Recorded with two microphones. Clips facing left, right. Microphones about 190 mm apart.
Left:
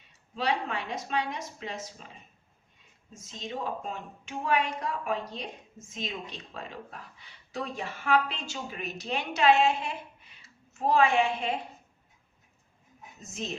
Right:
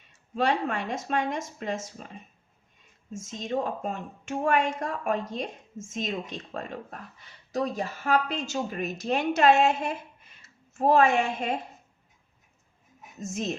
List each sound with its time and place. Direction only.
0.3 s speech: 45° right (ahead or behind)
3.1 s a woman's voice: 45° right (ahead or behind)
13.1 s speech: 45° right (ahead or behind)